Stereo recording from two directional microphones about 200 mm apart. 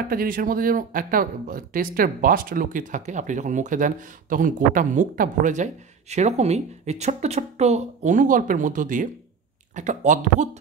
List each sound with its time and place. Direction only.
0.1 s speech: 45° right (ahead or behind)